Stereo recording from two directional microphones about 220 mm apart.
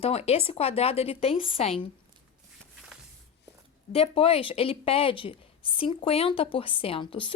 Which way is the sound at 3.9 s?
25° left (ahead or behind).